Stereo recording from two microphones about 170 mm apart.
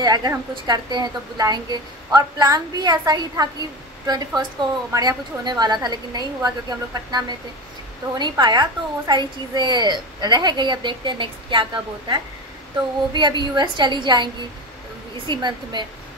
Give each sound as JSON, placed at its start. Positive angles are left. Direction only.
{"t": 0.0, "sound": "a woman's voice", "side_deg": -25}